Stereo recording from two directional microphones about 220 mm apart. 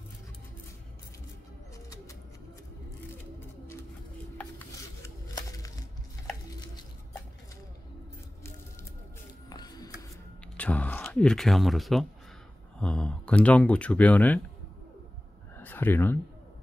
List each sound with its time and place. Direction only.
4.4 s music: 10° left (ahead or behind)
9.5 s music: 20° left (ahead or behind)
10.6 s speech: 5° left (ahead or behind)
15.5 s a sound: 10° left (ahead or behind)